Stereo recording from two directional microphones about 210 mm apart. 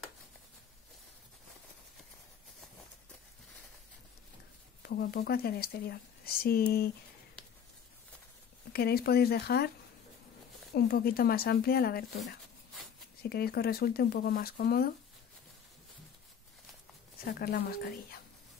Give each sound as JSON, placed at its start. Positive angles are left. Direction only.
{"t": 4.8, "sound": "speech", "side_deg": 50}
{"t": 8.7, "sound": "speech", "side_deg": 50}
{"t": 10.7, "sound": "speech", "side_deg": 50}
{"t": 13.2, "sound": "speech", "side_deg": 50}
{"t": 17.2, "sound": "speech", "side_deg": 50}